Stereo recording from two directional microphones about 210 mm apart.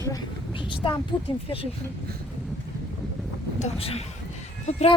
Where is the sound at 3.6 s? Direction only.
30° left (ahead or behind).